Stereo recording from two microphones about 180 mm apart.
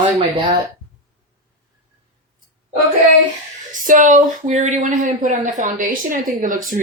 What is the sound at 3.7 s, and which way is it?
Speech, 45° right (ahead or behind).